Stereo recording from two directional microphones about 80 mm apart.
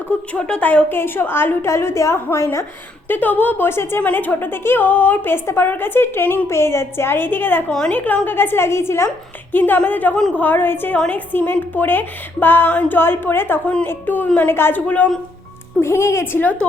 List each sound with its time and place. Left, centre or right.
0.3 s speech: centre
0.9 s a woman's voice: left
3.1 s a woman's voice: left
7.7 s speech: centre
7.9 s a woman's voice: centre
15.8 s a woman's voice: left